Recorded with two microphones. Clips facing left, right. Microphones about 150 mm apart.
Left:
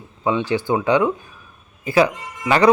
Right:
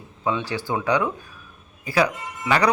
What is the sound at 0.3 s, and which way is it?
Speech, 20° left (ahead or behind).